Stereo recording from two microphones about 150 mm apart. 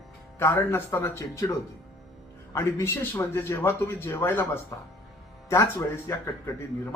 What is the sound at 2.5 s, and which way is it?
Speech, 15° left (ahead or behind).